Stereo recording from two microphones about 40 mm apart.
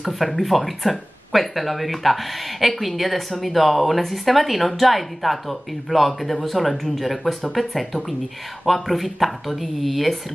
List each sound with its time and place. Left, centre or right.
0.3 s speech: centre